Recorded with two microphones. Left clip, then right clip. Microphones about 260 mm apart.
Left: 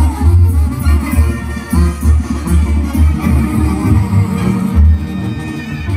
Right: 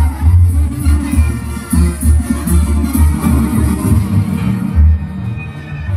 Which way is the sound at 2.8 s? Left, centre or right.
Centre.